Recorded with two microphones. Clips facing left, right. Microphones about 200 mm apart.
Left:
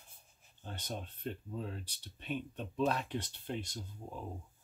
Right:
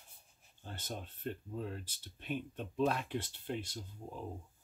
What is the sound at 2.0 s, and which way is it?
Speech, 45° right (ahead or behind).